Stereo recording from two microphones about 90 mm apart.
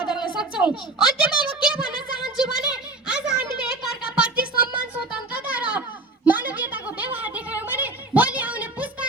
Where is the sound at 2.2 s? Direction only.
5° right (ahead or behind).